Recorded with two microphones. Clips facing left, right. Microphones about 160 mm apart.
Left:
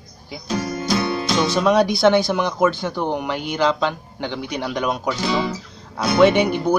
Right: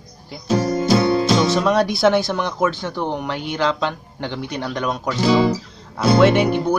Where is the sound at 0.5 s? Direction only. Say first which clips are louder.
Right 5 dB; 30° right (ahead or behind).